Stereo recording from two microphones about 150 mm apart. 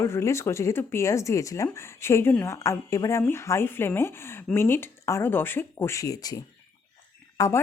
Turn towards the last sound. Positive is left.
turn(degrees=25)  # may be behind; listen again after turning